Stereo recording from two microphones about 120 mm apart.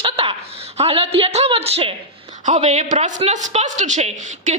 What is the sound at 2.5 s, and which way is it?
A woman's voice, 70° right (ahead or behind).